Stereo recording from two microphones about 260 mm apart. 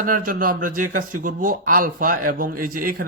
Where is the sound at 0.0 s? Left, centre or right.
Right.